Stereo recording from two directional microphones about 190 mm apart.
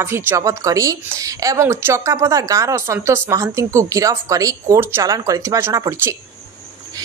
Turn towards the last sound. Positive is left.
turn(degrees=-15)  # may be behind; listen again after turning